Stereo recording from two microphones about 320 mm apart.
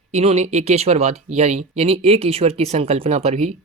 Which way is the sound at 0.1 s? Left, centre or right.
Centre.